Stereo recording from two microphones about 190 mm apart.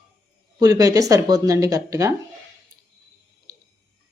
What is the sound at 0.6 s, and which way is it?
Speech, 20° right (ahead or behind).